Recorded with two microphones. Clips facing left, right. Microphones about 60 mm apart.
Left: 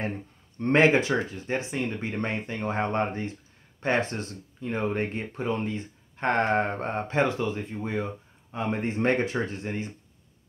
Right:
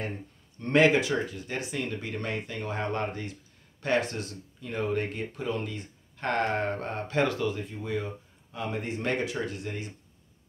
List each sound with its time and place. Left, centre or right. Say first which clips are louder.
0.6 s speech: left 2 dB; left